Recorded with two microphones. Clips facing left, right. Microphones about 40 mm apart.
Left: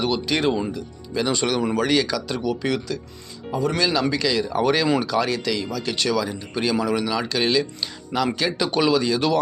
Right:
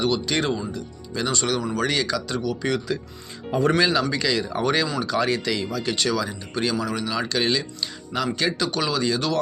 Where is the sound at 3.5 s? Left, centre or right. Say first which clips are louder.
Right 3 dB; right.